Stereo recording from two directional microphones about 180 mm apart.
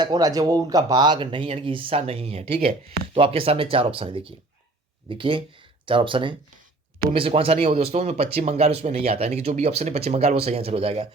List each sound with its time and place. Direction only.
0.0 s speech: 20° right (ahead or behind)